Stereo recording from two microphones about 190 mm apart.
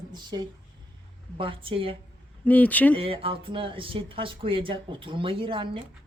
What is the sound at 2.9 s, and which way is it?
Speech, 30° right (ahead or behind).